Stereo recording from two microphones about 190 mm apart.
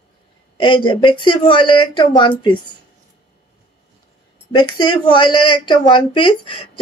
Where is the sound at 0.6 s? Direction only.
25° left (ahead or behind).